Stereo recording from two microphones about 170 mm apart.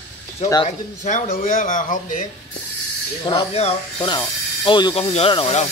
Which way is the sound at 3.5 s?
40° left (ahead or behind).